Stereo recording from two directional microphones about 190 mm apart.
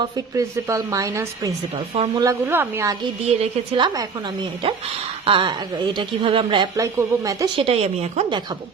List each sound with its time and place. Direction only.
0.0 s a woman's voice: 15° right (ahead or behind)
2.5 s a woman's voice: 15° right (ahead or behind)
3.8 s speech: 25° right (ahead or behind)
5.2 s speech: 25° right (ahead or behind)